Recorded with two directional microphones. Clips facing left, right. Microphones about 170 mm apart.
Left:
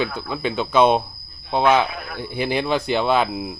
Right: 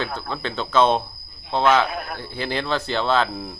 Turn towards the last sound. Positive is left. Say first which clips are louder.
# left 2 dB
turn(degrees=10)  # may be behind; listen again after turning